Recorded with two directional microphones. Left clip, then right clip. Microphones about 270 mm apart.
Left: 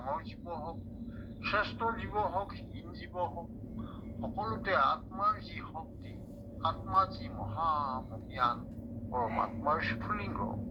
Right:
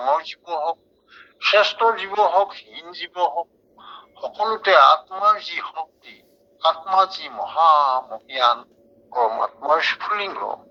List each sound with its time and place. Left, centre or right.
0.0 s a man's voice: right